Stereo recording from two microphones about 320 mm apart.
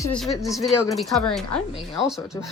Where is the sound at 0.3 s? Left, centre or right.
Centre.